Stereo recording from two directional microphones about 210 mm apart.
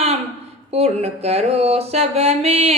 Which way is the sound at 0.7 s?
30° right (ahead or behind).